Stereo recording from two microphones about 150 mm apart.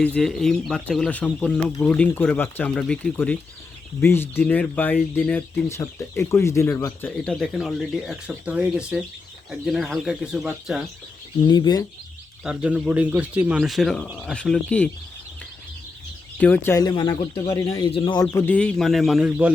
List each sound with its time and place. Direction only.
0.0 s speech: 5° left (ahead or behind)
7.3 s speech: centre (ahead or behind)
11.4 s speech: 30° left (ahead or behind)
12.4 s speech: 5° right (ahead or behind)
16.4 s speech: 10° left (ahead or behind)
16.7 s speech: 30° left (ahead or behind)
17.5 s speech: 25° left (ahead or behind)
18.3 s speech: 10° left (ahead or behind); by 19.5 s 5° right (ahead or behind)